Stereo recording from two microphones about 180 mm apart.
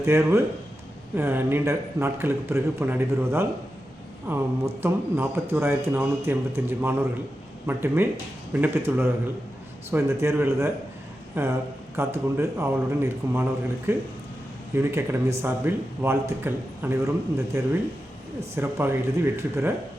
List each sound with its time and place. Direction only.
0.0 s speech: 15° right (ahead or behind)